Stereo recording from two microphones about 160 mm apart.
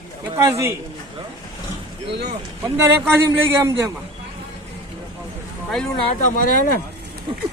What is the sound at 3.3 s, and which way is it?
Speech, 20° right (ahead or behind).